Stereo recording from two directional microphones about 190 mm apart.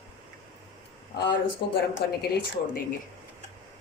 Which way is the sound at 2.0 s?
60° left (ahead or behind).